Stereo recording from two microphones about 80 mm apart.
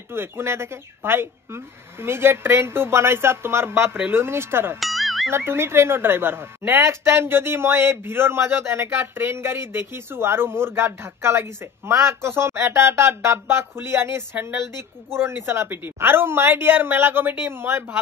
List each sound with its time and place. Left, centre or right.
0.1 s a woman's voice: right
4.7 s music: centre
5.3 s a woman's voice: right